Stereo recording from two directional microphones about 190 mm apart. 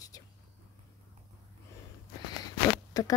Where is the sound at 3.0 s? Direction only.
20° left (ahead or behind).